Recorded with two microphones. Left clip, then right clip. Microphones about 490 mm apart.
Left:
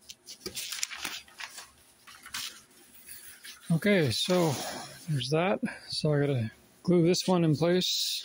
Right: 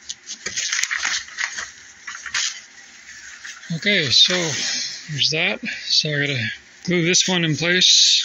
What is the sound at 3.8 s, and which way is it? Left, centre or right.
Speech, left.